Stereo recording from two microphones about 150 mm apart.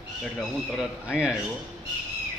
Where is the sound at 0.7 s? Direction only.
5° right (ahead or behind).